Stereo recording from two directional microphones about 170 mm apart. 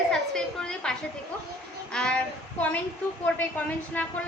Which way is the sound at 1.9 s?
5° left (ahead or behind).